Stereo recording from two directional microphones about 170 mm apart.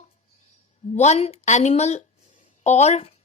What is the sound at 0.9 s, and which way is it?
A woman's voice, 40° left (ahead or behind).